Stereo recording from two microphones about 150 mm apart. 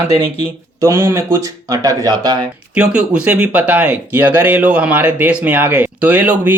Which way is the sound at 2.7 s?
5° right (ahead or behind).